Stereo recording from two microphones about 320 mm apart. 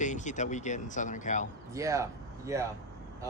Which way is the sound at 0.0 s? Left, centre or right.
Left.